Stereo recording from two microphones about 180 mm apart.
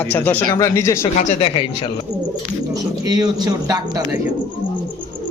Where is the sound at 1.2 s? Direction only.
30° left (ahead or behind).